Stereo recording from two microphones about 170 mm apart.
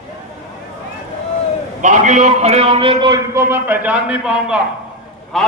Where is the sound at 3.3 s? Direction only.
15° right (ahead or behind); by 5.5 s centre (ahead or behind).